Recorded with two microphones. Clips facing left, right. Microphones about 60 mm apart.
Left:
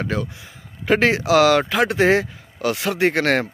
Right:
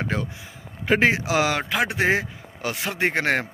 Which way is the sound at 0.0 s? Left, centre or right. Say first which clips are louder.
Left 3 dB; right.